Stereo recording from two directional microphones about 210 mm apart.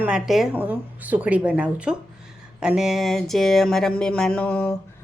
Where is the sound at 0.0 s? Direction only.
5° right (ahead or behind).